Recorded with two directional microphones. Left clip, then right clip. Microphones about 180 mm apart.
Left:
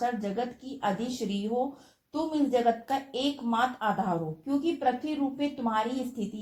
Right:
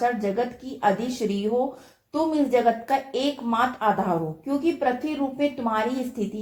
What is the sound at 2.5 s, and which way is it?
Speech, 30° left (ahead or behind).